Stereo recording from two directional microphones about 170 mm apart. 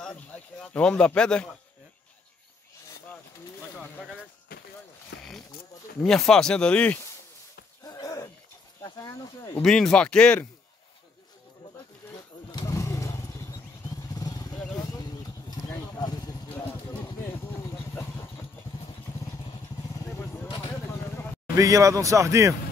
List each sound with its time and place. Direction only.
0.0 s speech: 5° left (ahead or behind)
4.5 s a sound: 60° left (ahead or behind)
6.0 s speech: centre (ahead or behind)
7.8 s a sound: 20° left (ahead or behind)
8.8 s speech: 20° left (ahead or behind)
9.6 s speech: 5° left (ahead or behind)
12.4 s motorcycle: 20° left (ahead or behind)
14.8 s vehicle: 20° left (ahead or behind)
21.5 s speech: 20° right (ahead or behind)